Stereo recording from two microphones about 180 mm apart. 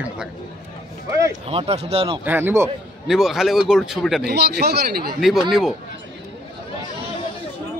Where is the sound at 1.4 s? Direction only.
35° right (ahead or behind).